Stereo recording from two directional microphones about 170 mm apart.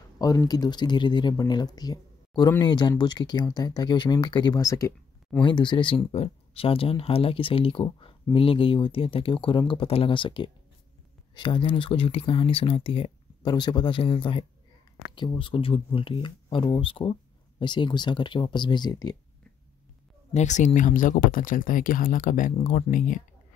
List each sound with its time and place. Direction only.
0.2 s speech: 20° left (ahead or behind)
20.3 s speech: 45° left (ahead or behind)